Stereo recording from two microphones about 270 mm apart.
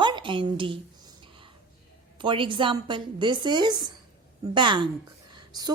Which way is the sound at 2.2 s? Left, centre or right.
Centre.